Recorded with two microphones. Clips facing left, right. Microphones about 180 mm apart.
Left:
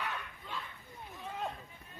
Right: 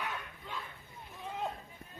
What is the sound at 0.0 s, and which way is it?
Bow-wow, 10° right (ahead or behind).